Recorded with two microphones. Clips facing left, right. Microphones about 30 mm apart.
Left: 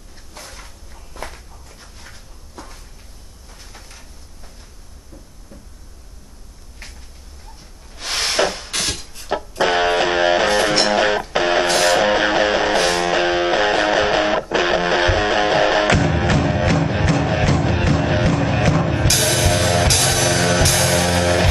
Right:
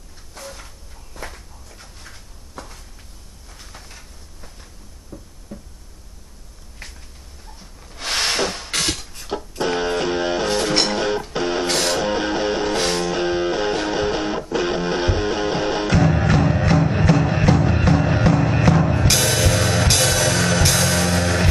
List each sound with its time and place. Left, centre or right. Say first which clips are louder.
3.7 s a sound: even; centre
5.1 s a sound: right 5 dB; centre
5.5 s a sound: right 6 dB; centre
7.9 s wood: right 1 dB; centre
8.6 s music: right 1 dB; centre
9.6 s music: left 5 dB; left
11.7 s music: left 6 dB; left
12.0 s music: left 5 dB; left
12.7 s music: left 4 dB; left
13.1 s music: left 4 dB; left
18.8 s drum kit: even; left
19.1 s music: left 3 dB; centre; by 21.1 s left
21.1 s music: left 3 dB; left